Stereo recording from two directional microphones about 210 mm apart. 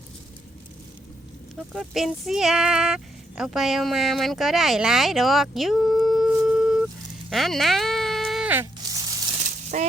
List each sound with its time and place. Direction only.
1.7 s speech: centre (ahead or behind)
7.3 s a sound: centre (ahead or behind)
9.7 s speech: 35° right (ahead or behind)